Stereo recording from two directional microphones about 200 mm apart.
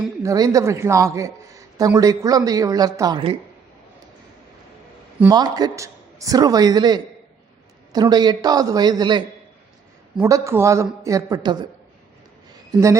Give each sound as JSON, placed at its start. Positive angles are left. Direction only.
{"t": 0.2, "sound": "speech", "side_deg": -15}
{"t": 5.2, "sound": "speech", "side_deg": -20}